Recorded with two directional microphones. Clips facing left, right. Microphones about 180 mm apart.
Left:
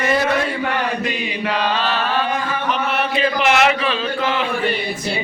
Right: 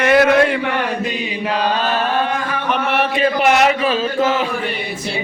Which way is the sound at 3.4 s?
40° right (ahead or behind).